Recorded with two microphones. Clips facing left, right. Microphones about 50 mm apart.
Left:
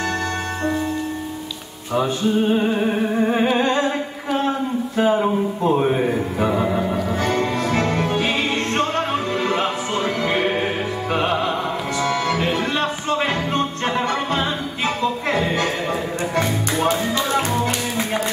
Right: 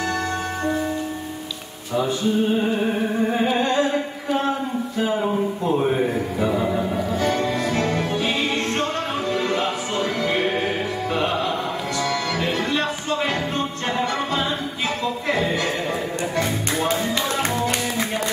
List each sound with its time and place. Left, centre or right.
3.3 s music: left
4.9 s speech: left
6.4 s music: left
7.2 s music: left
13.8 s music: left